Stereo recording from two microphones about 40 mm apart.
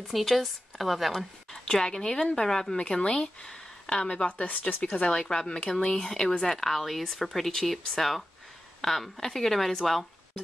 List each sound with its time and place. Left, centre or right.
0.1 s speech: centre
1.1 s speech: centre
3.0 s speech: left
4.3 s speech: left
5.0 s speech: centre
6.0 s speech: centre